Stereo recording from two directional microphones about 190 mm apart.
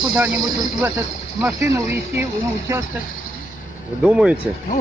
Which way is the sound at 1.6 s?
15° right (ahead or behind).